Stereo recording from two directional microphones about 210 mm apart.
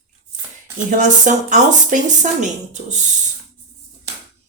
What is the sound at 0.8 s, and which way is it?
Speech, 40° right (ahead or behind).